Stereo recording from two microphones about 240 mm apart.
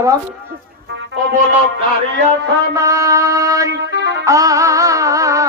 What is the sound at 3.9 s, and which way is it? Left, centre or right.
Music, right.